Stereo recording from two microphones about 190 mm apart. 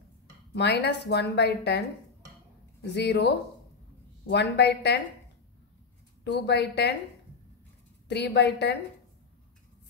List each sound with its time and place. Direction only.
0.5 s a woman's voice: 65° left (ahead or behind)
2.9 s a woman's voice: 65° left (ahead or behind)
6.2 s a woman's voice: 65° left (ahead or behind)
8.1 s a woman's voice: 65° left (ahead or behind)